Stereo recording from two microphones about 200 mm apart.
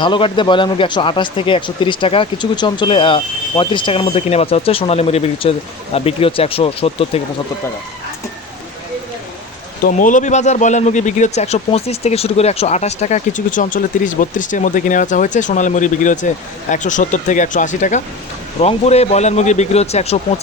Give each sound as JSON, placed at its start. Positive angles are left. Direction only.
{"t": 0.0, "sound": "speech", "side_deg": 25}
{"t": 9.8, "sound": "speech", "side_deg": 40}